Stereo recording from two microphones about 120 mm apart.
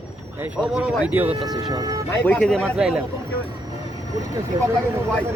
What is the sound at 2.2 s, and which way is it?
Speech, 10° left (ahead or behind).